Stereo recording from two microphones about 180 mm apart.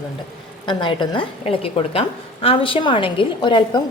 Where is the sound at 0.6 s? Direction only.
25° left (ahead or behind).